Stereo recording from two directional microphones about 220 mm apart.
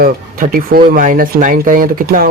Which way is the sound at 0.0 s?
40° right (ahead or behind).